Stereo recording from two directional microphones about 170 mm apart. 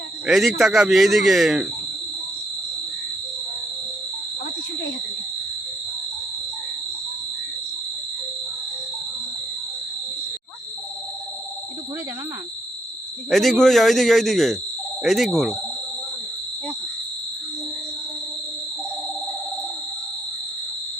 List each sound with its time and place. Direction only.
0.3 s speech: centre (ahead or behind)
13.3 s speech: centre (ahead or behind)